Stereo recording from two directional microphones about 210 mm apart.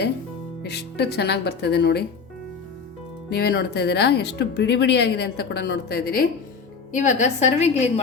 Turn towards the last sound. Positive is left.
turn(degrees=30)  # may be behind; listen again after turning